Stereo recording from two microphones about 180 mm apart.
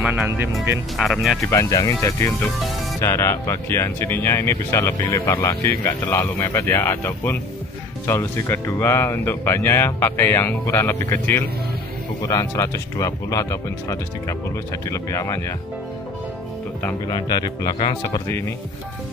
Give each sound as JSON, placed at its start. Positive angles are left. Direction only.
{"t": 0.0, "sound": "speech", "side_deg": -5}
{"t": 1.4, "sound": "speech", "side_deg": 15}
{"t": 17.1, "sound": "speech", "side_deg": 20}